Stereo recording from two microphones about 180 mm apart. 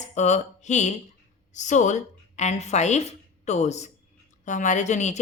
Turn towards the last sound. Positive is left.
turn(degrees=40)  # may be behind; listen again after turning